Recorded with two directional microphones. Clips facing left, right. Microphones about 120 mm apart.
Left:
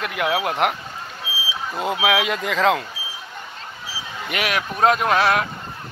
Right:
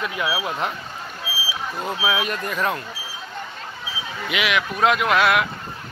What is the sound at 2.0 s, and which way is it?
Speech, 90° left.